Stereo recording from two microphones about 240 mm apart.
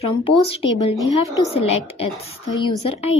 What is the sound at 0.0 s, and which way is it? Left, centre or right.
A woman's voice, left.